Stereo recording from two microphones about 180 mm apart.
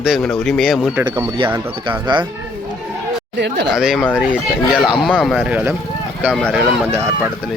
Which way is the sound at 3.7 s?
5° right (ahead or behind).